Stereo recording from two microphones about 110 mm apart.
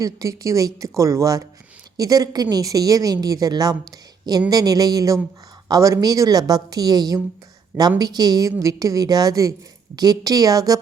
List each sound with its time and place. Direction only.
0.0 s a woman's voice: 30° right (ahead or behind)